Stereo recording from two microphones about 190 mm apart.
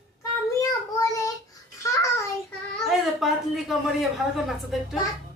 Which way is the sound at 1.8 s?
15° left (ahead or behind).